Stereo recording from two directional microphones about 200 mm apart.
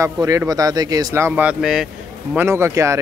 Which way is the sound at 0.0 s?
15° right (ahead or behind).